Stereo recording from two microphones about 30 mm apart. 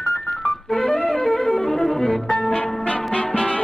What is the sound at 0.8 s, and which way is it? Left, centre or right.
Music, left.